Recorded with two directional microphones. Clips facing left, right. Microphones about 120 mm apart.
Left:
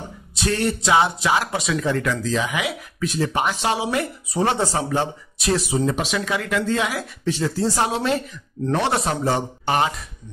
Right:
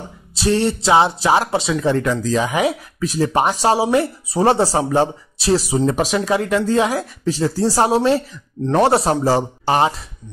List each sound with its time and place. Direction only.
0.3 s speech: 30° right (ahead or behind)